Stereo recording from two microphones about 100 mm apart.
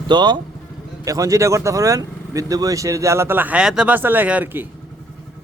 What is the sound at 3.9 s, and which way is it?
Speech, 20° right (ahead or behind).